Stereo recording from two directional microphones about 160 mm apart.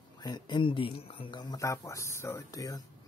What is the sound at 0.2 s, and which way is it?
Speech, 25° left (ahead or behind).